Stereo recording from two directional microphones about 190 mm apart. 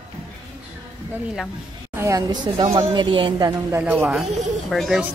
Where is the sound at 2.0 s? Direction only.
20° right (ahead or behind).